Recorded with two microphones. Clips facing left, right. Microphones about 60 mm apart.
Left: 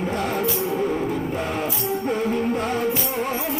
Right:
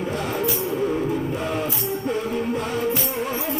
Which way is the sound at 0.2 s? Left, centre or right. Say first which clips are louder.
Left 2 dB; centre.